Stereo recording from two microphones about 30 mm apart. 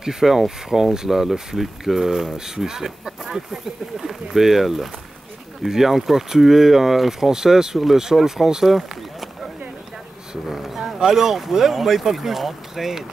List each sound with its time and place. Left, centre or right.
0.0 s speech: centre
8.6 s speech: centre
10.5 s speech: centre